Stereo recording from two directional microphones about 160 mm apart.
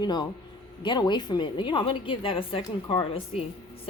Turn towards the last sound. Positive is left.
turn(degrees=35)  # may be behind; listen again after turning